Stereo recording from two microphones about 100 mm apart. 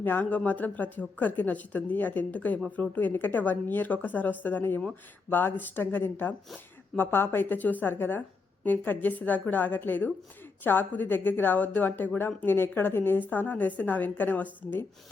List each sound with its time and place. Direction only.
0.0 s speech: 20° left (ahead or behind)